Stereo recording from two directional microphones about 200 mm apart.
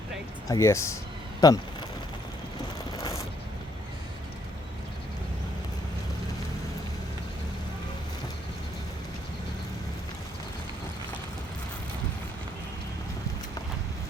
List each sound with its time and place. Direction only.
0.4 s speech: 15° left (ahead or behind)